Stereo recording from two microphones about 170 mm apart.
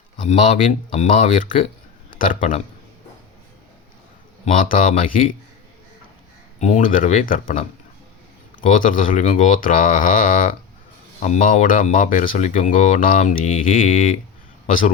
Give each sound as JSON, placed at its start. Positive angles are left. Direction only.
{"t": 0.7, "sound": "speech", "side_deg": 50}
{"t": 4.4, "sound": "speech", "side_deg": 50}
{"t": 6.6, "sound": "speech", "side_deg": 45}